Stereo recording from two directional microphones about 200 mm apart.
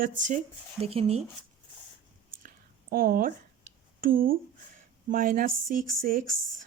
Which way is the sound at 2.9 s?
45° right (ahead or behind).